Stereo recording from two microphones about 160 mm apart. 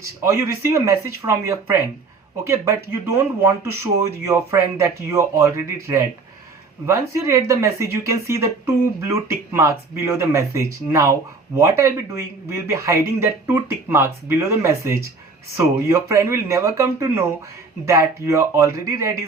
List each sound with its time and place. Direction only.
0.2 s speech: 15° right (ahead or behind)